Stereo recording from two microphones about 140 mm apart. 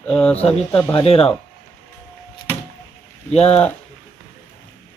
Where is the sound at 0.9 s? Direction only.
45° left (ahead or behind).